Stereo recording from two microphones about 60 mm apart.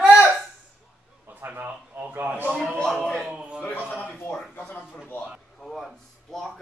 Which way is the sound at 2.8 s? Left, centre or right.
Centre.